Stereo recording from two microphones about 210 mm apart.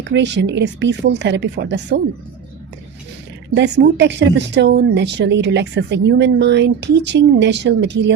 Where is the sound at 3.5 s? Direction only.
55° right (ahead or behind).